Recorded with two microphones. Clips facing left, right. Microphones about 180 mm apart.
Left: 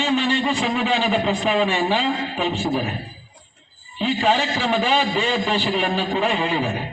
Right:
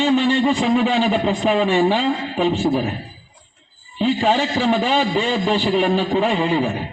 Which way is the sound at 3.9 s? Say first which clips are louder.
Right 2 dB; 40° right (ahead or behind).